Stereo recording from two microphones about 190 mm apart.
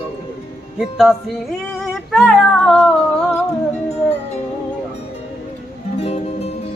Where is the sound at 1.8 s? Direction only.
Centre (ahead or behind).